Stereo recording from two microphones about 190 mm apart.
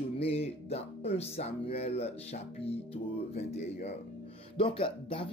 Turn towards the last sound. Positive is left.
turn(degrees=30)  # may be behind; listen again after turning